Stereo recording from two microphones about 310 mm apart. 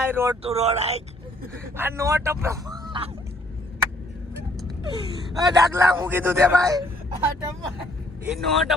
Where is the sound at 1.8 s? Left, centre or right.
Centre.